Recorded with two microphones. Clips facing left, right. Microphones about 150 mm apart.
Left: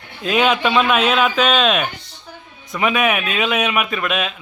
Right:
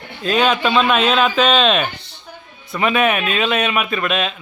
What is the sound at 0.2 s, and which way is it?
A man's voice, 10° left (ahead or behind).